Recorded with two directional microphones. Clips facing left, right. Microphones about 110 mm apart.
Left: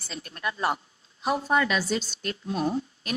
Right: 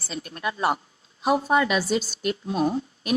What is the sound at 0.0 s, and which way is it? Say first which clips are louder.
A woman's voice: right 3 dB; 15° right (ahead or behind).